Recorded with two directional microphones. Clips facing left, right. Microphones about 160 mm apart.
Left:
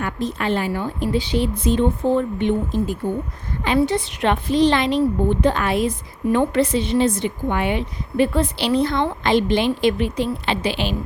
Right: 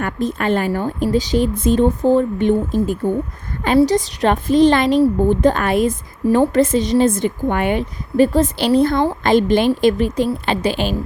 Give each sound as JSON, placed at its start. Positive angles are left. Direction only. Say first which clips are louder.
{"t": 0.0, "sound": "speech", "louder": "right 4 dB", "side_deg": -50}
{"t": 6.2, "sound": "speech", "louder": "right 4 dB", "side_deg": -35}